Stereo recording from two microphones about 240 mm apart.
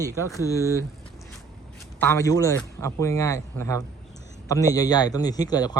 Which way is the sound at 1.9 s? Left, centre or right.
Centre.